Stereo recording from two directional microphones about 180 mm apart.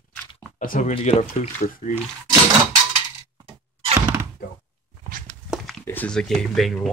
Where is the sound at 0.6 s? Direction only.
45° left (ahead or behind).